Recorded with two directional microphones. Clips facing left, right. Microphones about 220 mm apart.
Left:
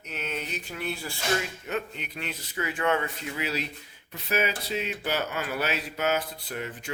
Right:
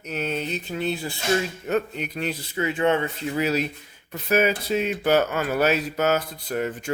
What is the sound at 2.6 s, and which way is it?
Speech, 25° right (ahead or behind).